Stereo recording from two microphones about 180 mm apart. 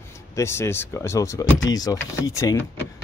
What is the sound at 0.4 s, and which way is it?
Speech, 15° left (ahead or behind).